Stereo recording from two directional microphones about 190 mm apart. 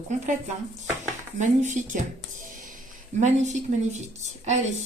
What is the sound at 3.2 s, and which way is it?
Speech, 40° right (ahead or behind).